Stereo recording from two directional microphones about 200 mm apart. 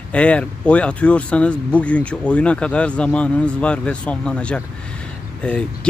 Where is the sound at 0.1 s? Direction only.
5° left (ahead or behind).